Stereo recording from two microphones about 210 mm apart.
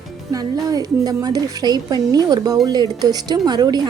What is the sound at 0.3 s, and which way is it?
A woman's voice, 15° right (ahead or behind).